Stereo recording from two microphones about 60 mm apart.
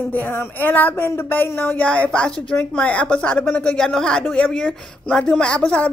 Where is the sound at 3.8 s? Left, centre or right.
Centre.